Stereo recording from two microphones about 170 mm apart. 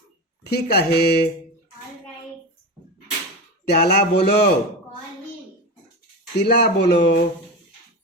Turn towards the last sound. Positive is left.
turn(degrees=80)